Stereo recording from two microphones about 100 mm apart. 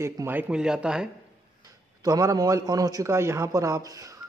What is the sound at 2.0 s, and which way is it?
A man's voice, 35° right (ahead or behind).